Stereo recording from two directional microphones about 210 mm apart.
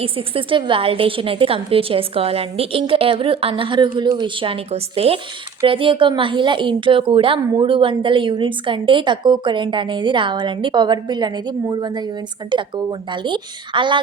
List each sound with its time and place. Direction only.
0.0 s speech: 25° right (ahead or behind)